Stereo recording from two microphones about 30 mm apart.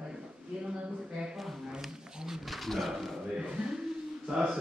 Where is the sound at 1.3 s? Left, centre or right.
Centre.